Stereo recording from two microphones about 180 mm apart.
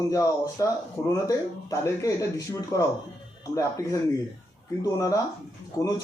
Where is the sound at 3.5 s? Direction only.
15° left (ahead or behind).